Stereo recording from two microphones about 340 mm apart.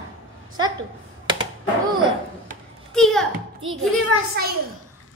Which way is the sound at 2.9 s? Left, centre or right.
Centre.